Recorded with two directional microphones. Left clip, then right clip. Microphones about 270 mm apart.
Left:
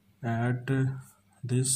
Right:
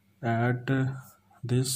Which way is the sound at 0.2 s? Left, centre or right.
Right.